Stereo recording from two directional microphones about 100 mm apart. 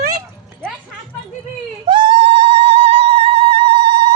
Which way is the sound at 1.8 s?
55° right (ahead or behind).